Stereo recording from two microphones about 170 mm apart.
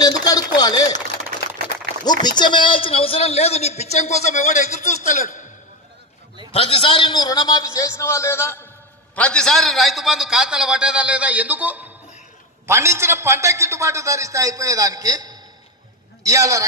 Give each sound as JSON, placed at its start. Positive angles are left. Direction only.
{"t": 0.0, "sound": "chopping", "side_deg": 25}
{"t": 2.0, "sound": "a man's voice", "side_deg": 25}
{"t": 6.5, "sound": "a man's voice", "side_deg": 35}